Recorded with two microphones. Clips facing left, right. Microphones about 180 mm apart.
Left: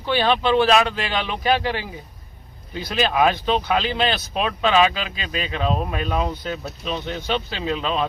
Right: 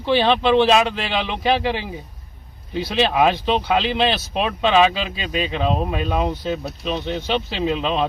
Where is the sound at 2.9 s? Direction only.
25° right (ahead or behind).